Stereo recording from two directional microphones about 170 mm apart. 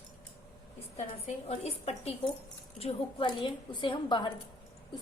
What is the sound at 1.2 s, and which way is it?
A woman's voice, 35° left (ahead or behind).